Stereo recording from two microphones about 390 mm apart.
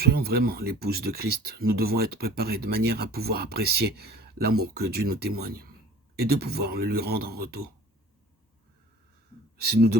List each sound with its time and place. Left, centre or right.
0.0 s speech: right
9.6 s speech: right